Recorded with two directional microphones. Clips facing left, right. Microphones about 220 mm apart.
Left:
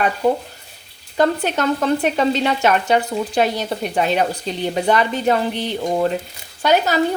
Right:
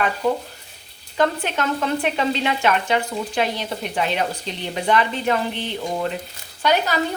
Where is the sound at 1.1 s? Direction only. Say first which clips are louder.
Left 4 dB; 40° left (ahead or behind).